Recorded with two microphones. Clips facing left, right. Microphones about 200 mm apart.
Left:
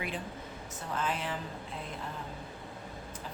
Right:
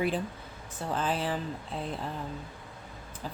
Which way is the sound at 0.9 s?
35° right (ahead or behind).